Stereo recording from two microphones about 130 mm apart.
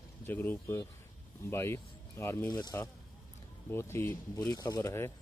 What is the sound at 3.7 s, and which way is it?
Speech, 15° left (ahead or behind).